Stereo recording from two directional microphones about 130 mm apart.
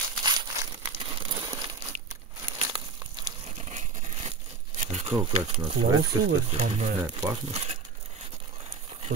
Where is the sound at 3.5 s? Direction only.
55° right (ahead or behind).